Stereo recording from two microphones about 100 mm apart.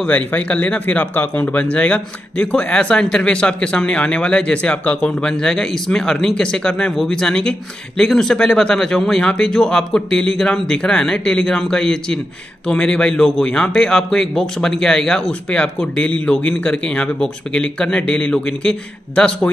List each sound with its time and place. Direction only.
0.0 s speech: 15° left (ahead or behind)